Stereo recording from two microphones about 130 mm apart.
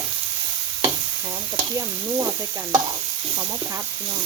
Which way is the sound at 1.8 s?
25° right (ahead or behind).